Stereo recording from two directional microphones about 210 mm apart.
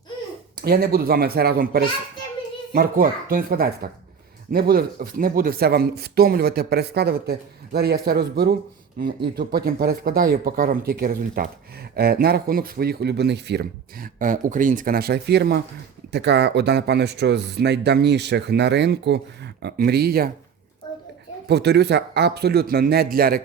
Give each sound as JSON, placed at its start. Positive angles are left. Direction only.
{"t": 0.5, "sound": "speech", "side_deg": -45}
{"t": 21.4, "sound": "speech", "side_deg": -50}